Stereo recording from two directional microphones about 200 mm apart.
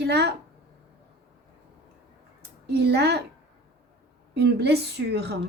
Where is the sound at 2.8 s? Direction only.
55° right (ahead or behind).